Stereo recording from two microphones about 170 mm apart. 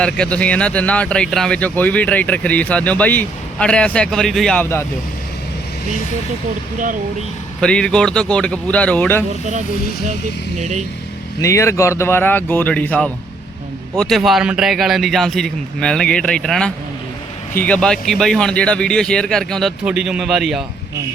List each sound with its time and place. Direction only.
0.0 s speech: 5° left (ahead or behind)
7.6 s speech: 5° left (ahead or behind)
10.6 s speech: 45° right (ahead or behind)
11.3 s speech: 15° left (ahead or behind); by 20.7 s centre (ahead or behind)